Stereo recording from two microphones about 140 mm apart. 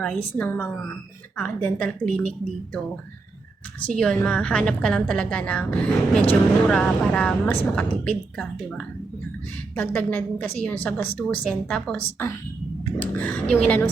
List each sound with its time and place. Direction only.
0.0 s a woman's voice: 10° left (ahead or behind)
3.9 s a woman's voice: 5° left (ahead or behind)